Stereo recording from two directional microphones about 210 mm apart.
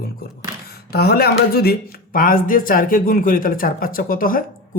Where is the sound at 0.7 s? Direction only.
50° left (ahead or behind).